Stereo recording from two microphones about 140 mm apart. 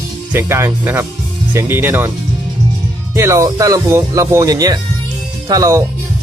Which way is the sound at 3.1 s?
20° right (ahead or behind).